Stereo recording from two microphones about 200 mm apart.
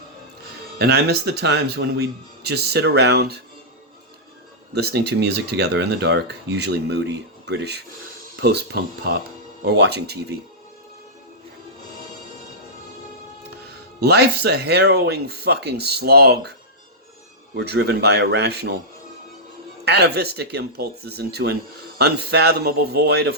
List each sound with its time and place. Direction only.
0.8 s speech: 55° right (ahead or behind)
4.7 s speech: 55° right (ahead or behind)
14.0 s speech: 55° right (ahead or behind)
19.8 s speech: 55° right (ahead or behind)